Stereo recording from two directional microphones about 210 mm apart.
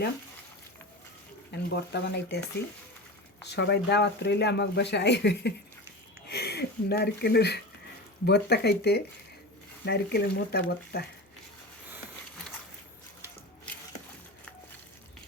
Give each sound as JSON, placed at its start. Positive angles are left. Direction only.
{"t": 1.5, "sound": "speech", "side_deg": 55}
{"t": 3.5, "sound": "speech", "side_deg": 50}